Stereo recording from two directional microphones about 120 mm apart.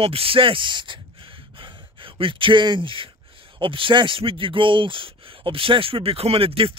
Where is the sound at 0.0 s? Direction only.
50° right (ahead or behind).